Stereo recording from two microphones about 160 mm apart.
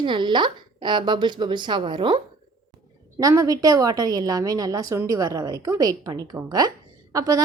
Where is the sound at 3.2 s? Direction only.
20° right (ahead or behind).